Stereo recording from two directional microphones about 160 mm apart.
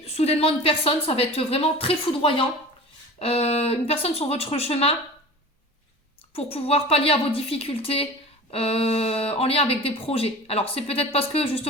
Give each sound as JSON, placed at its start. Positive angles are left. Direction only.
{"t": 0.0, "sound": "speech", "side_deg": 40}
{"t": 6.3, "sound": "speech", "side_deg": 35}